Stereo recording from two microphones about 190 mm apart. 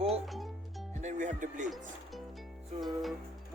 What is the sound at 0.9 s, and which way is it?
Speech, 35° right (ahead or behind).